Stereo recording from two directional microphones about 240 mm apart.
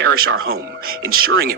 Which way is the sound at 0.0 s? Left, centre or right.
Right.